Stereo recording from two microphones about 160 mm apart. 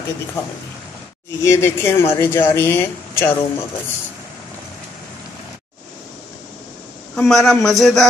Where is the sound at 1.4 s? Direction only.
15° left (ahead or behind).